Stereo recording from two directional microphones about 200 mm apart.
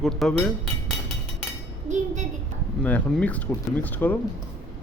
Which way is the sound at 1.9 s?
35° right (ahead or behind).